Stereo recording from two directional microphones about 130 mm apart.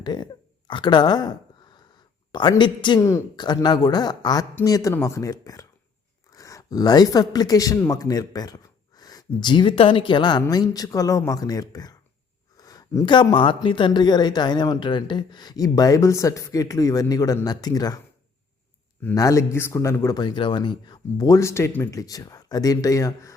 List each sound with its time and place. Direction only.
0.0 s speech: 35° left (ahead or behind)
2.3 s speech: 35° left (ahead or behind)
3.0 s speech: 20° left (ahead or behind)
3.3 s speech: 35° left (ahead or behind)
12.5 s a sound: 30° left (ahead or behind)
13.1 s speech: 40° left (ahead or behind)
19.1 s speech: 25° left (ahead or behind)
20.1 s speech: 35° left (ahead or behind)